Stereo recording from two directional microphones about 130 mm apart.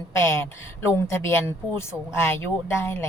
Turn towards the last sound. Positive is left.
turn(degrees=20)  # may be behind; listen again after turning